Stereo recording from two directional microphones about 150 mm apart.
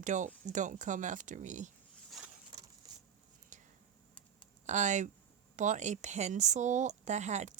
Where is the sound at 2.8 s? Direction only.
25° right (ahead or behind).